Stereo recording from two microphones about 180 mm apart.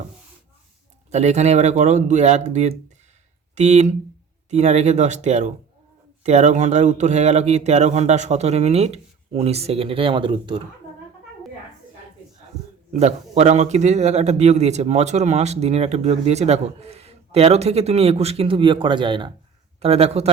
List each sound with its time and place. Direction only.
1.1 s speech: 40° right (ahead or behind)
12.9 s speech: 35° right (ahead or behind)